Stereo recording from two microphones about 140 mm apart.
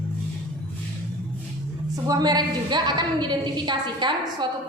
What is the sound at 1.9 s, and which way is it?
A woman's voice, 25° right (ahead or behind).